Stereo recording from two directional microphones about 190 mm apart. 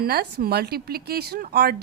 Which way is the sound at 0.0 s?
55° right (ahead or behind).